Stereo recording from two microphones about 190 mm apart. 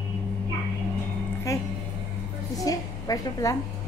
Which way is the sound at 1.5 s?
15° left (ahead or behind).